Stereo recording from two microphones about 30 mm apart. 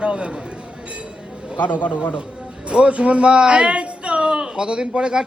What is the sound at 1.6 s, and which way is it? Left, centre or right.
Speech, left.